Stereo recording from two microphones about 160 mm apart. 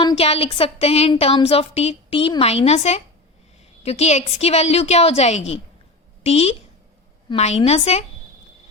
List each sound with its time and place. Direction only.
0.2 s a woman's voice: 40° left (ahead or behind)